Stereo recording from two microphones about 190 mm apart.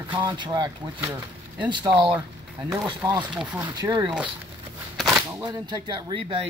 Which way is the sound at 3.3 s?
5° right (ahead or behind).